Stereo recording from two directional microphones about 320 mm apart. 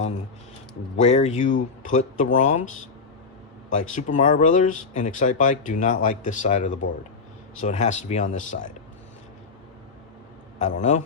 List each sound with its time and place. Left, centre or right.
0.9 s speech: left
3.7 s speech: left
10.6 s speech: left